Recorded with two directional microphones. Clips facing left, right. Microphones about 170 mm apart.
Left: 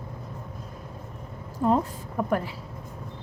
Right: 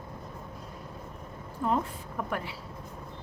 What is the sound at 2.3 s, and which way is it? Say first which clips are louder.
Speech: left 8 dB; 45° left (ahead or behind).